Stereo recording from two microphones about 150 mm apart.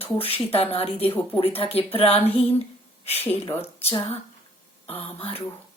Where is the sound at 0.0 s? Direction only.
40° left (ahead or behind).